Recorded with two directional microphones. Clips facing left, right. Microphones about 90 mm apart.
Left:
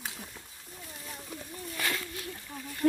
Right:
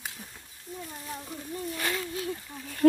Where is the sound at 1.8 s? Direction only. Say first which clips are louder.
Right 1 dB; 20° right (ahead or behind).